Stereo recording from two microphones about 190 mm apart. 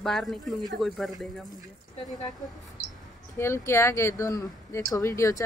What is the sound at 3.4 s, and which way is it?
Speech, 15° left (ahead or behind).